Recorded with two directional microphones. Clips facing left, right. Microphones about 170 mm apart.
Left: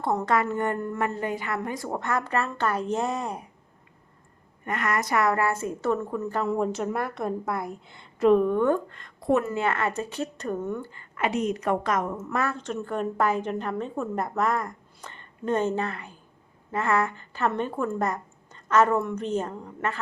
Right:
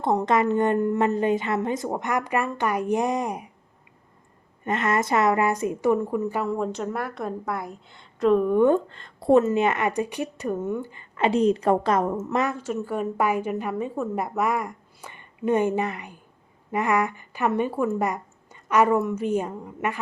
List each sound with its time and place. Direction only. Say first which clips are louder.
0.0 s a woman's voice: right 3 dB; 20° right (ahead or behind)
4.6 s a woman's voice: right 4 dB; 25° right (ahead or behind)
6.5 s a woman's voice: left 1 dB; 5° left (ahead or behind)
8.5 s speech: right 4 dB; 20° right (ahead or behind)
12.5 s a woman's voice: right 2 dB; 5° right (ahead or behind)